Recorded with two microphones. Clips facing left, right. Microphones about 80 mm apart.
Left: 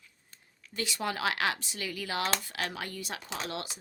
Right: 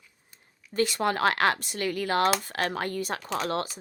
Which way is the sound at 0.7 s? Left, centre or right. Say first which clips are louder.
Right 8 dB; right.